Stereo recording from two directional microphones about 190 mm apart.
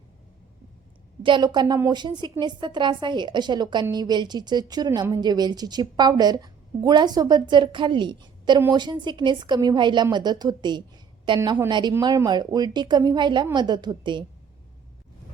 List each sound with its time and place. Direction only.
1.2 s a woman's voice: 25° right (ahead or behind)